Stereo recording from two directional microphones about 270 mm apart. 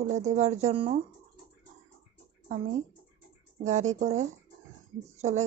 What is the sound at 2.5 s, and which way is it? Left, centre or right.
Speech, right.